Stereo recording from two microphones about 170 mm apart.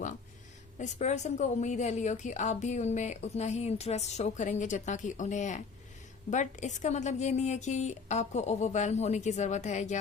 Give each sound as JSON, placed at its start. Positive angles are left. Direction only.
{"t": 0.8, "sound": "a woman's voice", "side_deg": 45}